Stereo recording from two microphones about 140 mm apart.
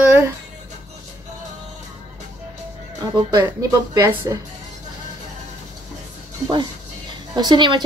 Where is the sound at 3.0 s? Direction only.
30° right (ahead or behind).